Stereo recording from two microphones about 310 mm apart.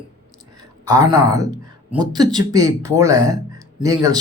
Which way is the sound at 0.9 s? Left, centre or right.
Centre.